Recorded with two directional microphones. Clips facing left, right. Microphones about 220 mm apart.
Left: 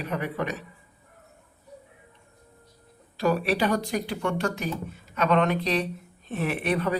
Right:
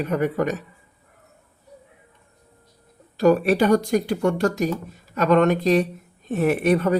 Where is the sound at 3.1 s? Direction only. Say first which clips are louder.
Right 7 dB; 45° right (ahead or behind).